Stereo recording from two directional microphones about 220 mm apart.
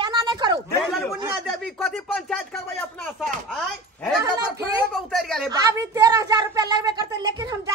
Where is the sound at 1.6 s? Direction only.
Centre (ahead or behind).